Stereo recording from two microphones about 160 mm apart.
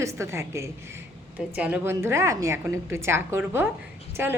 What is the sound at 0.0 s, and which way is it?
A woman's voice, 15° right (ahead or behind).